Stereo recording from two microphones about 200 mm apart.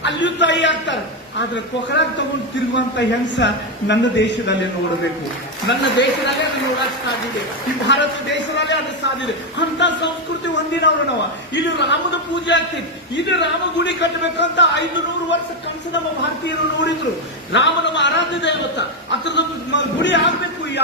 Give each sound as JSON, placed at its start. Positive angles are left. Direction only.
{"t": 0.0, "sound": "a man's voice", "side_deg": 60}
{"t": 5.6, "sound": "a man's voice", "side_deg": 65}
{"t": 7.9, "sound": "a man's voice", "side_deg": 60}
{"t": 17.5, "sound": "a man's voice", "side_deg": 60}